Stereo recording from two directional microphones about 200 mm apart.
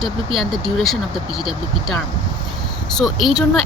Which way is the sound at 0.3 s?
25° right (ahead or behind).